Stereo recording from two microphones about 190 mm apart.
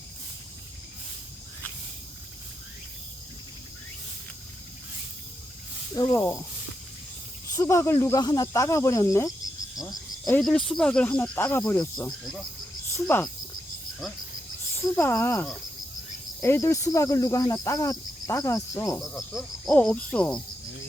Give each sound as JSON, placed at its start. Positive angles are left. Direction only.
{"t": 5.9, "sound": "speech", "side_deg": 20}
{"t": 7.5, "sound": "speech", "side_deg": 15}
{"t": 9.7, "sound": "cricket", "side_deg": 20}
{"t": 10.4, "sound": "speech", "side_deg": 0}
{"t": 12.9, "sound": "cricket", "side_deg": 10}
{"t": 14.0, "sound": "speech", "side_deg": 0}
{"t": 14.8, "sound": "speech", "side_deg": 10}
{"t": 18.9, "sound": "speech", "side_deg": 0}